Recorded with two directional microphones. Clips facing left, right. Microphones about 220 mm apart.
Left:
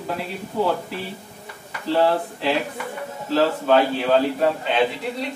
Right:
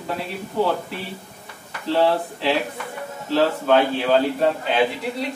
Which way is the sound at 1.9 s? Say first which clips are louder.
Even; centre (ahead or behind).